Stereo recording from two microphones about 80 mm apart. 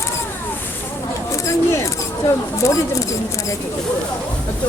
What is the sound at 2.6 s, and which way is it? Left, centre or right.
Speech, left.